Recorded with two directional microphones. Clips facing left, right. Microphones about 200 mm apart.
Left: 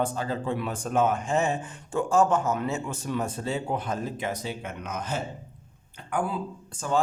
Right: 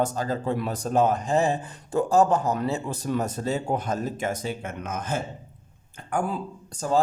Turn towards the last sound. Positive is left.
turn(degrees=-35)  # may be behind; listen again after turning